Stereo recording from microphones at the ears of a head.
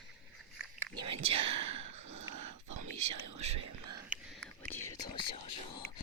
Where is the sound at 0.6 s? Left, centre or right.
Right.